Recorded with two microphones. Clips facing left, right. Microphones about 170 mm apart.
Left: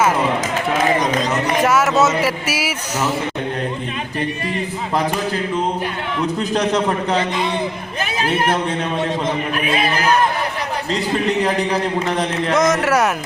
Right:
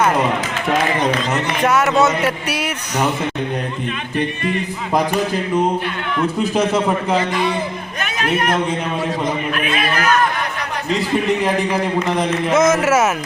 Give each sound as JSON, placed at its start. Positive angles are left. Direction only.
{"t": 1.6, "sound": "speech", "side_deg": 0}
{"t": 6.5, "sound": "speech", "side_deg": -5}
{"t": 7.2, "sound": "a man's voice", "side_deg": 20}
{"t": 9.6, "sound": "a man's voice", "side_deg": 30}
{"t": 12.0, "sound": "speech", "side_deg": 0}